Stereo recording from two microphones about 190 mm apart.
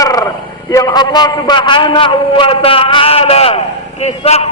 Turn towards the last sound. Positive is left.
turn(degrees=35)  # may be behind; listen again after turning